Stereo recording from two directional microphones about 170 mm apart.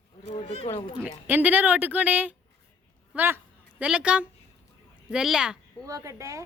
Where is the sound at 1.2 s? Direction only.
10° right (ahead or behind).